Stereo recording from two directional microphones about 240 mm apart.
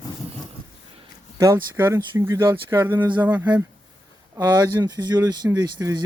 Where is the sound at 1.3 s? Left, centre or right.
Centre.